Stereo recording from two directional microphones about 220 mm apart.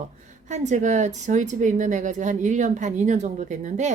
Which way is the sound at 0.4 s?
35° right (ahead or behind).